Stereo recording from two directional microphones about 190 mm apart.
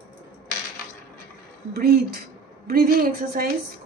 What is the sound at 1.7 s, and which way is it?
Speech, 50° right (ahead or behind).